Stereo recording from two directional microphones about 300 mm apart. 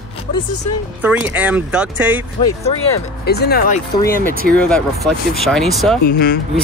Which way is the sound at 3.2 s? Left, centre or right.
Left.